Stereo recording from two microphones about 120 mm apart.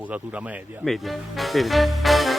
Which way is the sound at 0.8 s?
Centre (ahead or behind).